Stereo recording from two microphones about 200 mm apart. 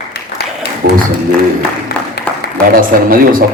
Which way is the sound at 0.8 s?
45° right (ahead or behind).